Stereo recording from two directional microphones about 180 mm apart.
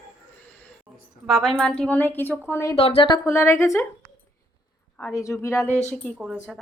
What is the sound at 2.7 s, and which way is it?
Speech, 35° left (ahead or behind).